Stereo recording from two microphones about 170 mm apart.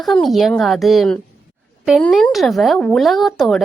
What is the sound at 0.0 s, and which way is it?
Speech, centre (ahead or behind).